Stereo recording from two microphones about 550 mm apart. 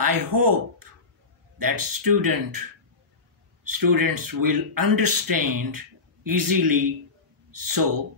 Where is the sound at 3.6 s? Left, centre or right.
Right.